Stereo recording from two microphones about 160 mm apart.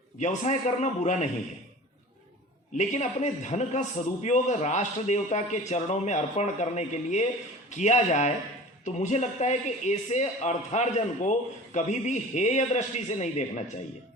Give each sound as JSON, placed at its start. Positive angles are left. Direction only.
{"t": 0.2, "sound": "a man's voice", "side_deg": 45}
{"t": 2.7, "sound": "a man's voice", "side_deg": 45}